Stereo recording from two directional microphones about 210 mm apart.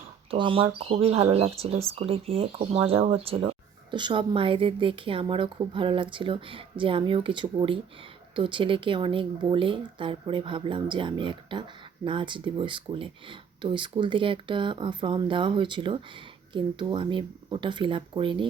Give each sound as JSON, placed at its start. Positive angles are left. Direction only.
{"t": 0.3, "sound": "speech", "side_deg": -25}